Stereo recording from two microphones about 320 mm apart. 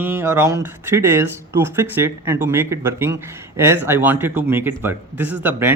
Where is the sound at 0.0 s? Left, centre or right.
Centre.